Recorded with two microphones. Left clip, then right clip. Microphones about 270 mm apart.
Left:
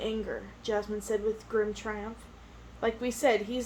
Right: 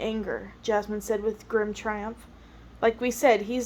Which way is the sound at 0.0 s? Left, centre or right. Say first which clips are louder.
Right 3 dB; right.